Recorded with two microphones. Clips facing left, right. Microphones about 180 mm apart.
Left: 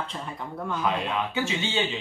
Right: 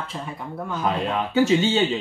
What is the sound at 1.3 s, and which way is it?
Speech, 40° right (ahead or behind).